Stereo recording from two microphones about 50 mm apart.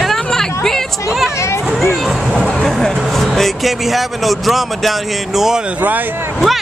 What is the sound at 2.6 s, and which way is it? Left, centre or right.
Speech, centre.